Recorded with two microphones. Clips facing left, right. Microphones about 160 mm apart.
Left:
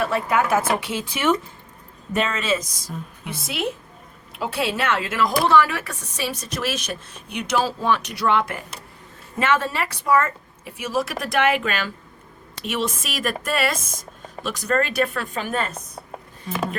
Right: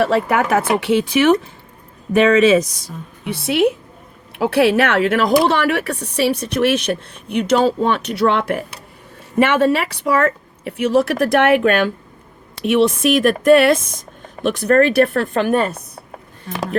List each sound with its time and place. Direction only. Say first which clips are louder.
0.0 s a woman's voice: right 5 dB; 65° right (ahead or behind)